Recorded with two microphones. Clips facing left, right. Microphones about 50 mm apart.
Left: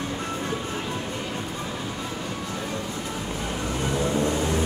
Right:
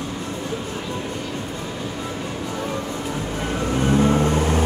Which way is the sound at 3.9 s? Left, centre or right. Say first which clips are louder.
Right 6 dB; right.